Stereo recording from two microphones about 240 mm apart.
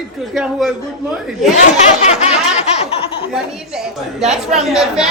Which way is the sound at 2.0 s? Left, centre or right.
Left.